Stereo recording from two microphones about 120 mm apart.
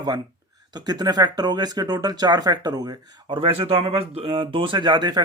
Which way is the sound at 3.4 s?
50° right (ahead or behind).